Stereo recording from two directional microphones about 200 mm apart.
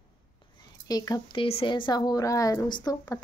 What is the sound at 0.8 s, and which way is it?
Speech, 20° left (ahead or behind).